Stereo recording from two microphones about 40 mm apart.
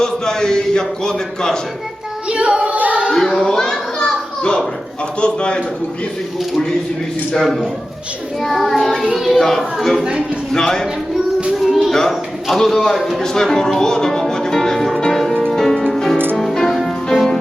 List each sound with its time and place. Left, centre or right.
0.0 s a man's voice: centre
2.3 s singing: right
3.3 s children playing: centre
5.2 s a man's voice: left
8.4 s child singing: centre
9.4 s a man's voice: centre
11.5 s music: centre
11.9 s a man's voice: centre
15.5 s music: centre